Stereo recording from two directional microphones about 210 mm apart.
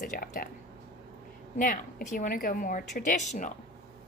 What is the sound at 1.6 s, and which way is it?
Speech, 40° left (ahead or behind).